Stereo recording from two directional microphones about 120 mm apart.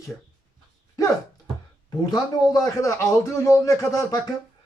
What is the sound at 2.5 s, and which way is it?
Speech, 25° left (ahead or behind).